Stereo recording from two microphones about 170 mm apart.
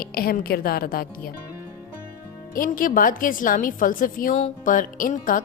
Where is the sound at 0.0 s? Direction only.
60° left (ahead or behind).